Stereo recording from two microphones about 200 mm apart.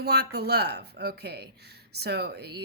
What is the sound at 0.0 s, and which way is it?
A woman's voice, 55° right (ahead or behind).